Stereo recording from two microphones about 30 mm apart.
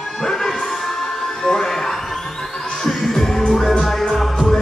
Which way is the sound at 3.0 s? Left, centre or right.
Centre.